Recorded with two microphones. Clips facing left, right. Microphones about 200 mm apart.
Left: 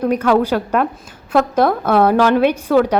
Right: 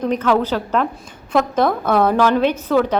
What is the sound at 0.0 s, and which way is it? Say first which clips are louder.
A woman's voice: left 3 dB; 10° left (ahead or behind).